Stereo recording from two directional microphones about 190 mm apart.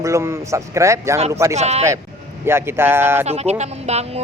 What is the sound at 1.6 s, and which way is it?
Speech, 35° right (ahead or behind).